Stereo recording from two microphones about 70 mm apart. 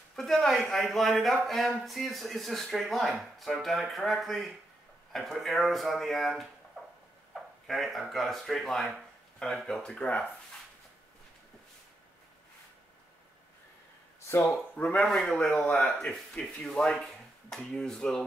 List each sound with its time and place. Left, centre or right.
0.1 s speech: centre
7.6 s speech: centre
14.2 s speech: left
15.0 s speech: centre